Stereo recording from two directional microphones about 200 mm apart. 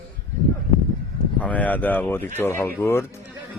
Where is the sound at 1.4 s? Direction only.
5° left (ahead or behind).